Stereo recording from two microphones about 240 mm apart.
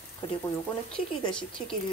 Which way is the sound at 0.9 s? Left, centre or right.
Left.